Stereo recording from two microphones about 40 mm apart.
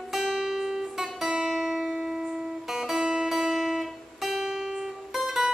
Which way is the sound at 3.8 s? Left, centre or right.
Centre.